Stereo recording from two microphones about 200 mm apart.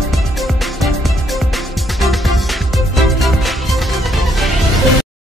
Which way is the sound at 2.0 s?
Centre (ahead or behind).